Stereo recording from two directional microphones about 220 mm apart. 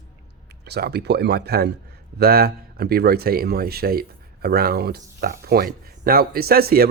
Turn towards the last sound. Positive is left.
turn(degrees=-45)  # may be behind; listen again after turning